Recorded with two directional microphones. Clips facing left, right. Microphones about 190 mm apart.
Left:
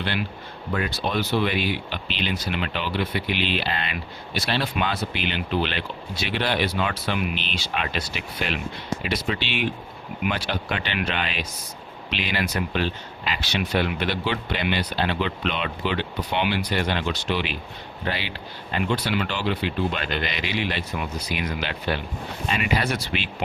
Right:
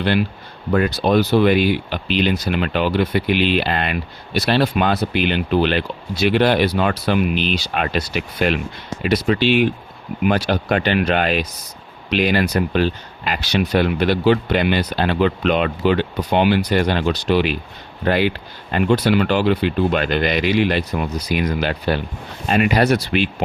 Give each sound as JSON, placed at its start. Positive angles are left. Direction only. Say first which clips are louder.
{"t": 0.7, "sound": "speech", "louder": "right 10 dB", "side_deg": -45}